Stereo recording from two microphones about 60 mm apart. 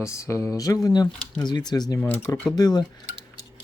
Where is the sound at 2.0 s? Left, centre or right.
Left.